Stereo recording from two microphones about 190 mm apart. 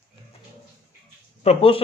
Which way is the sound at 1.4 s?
30° left (ahead or behind).